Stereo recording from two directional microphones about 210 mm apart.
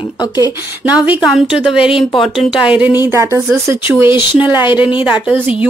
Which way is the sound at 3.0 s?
15° right (ahead or behind).